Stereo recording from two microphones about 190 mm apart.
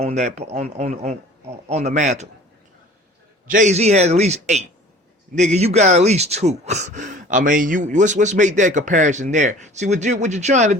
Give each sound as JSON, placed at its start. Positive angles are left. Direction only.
{"t": 0.0, "sound": "speech", "side_deg": -35}
{"t": 3.5, "sound": "speech", "side_deg": -40}